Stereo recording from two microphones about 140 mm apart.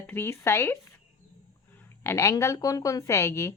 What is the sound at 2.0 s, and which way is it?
Speech, 15° left (ahead or behind).